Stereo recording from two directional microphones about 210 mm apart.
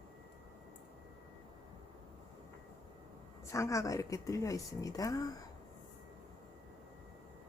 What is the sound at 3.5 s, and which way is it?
Speech, 15° left (ahead or behind).